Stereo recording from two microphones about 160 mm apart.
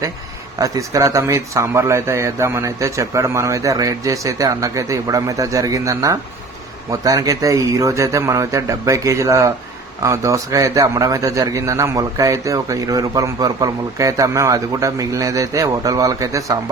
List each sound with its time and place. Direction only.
0.6 s a man's voice: 20° right (ahead or behind)